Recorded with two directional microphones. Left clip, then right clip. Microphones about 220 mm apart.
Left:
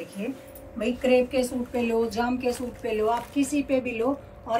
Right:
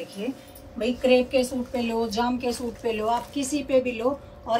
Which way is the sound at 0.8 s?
30° right (ahead or behind).